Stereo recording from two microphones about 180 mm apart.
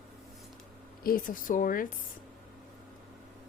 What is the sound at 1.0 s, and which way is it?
Speech, 50° left (ahead or behind).